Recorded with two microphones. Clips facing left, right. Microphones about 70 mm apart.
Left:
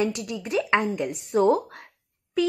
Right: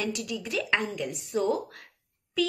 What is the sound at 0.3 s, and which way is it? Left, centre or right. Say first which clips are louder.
Speech: left 3 dB; left.